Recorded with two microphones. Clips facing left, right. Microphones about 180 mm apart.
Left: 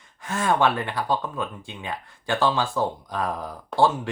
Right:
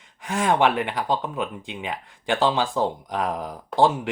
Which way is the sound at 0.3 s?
15° right (ahead or behind).